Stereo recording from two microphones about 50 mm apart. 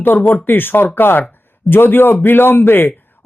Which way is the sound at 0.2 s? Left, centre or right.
Left.